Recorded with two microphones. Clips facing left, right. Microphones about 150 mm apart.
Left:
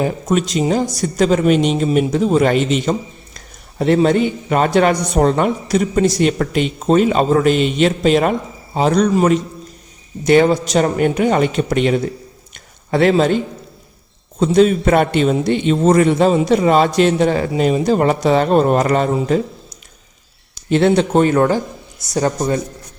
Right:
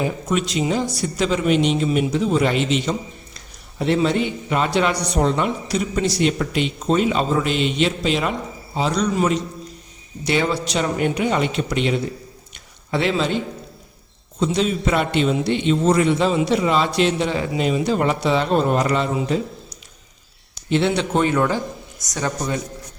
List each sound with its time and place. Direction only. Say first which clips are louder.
0.0 s a man's voice: left 5 dB; 45° left (ahead or behind)
14.3 s a man's voice: left 8 dB; 50° left (ahead or behind)